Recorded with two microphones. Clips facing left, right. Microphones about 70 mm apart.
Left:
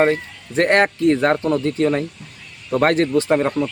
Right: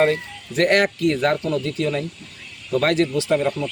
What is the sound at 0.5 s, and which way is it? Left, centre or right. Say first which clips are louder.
Speech: left 2 dB; left.